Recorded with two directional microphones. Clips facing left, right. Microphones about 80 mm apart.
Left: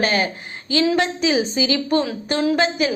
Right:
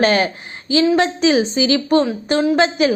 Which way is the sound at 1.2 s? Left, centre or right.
Right.